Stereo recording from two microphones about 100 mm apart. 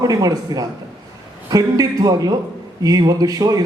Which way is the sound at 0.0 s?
35° right (ahead or behind).